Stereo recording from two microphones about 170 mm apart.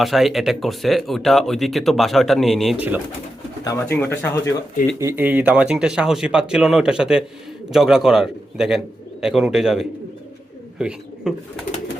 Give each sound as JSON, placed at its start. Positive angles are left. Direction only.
{"t": 0.0, "sound": "speech", "side_deg": 0}
{"t": 2.7, "sound": "speech", "side_deg": -10}
{"t": 3.6, "sound": "speech", "side_deg": 15}
{"t": 4.9, "sound": "speech", "side_deg": -15}